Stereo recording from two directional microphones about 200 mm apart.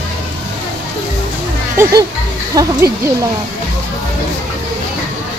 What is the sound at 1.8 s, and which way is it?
Speech, 15° right (ahead or behind).